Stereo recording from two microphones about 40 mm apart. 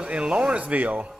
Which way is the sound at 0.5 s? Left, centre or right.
Right.